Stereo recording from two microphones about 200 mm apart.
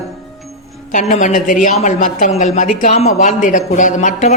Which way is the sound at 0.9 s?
35° left (ahead or behind).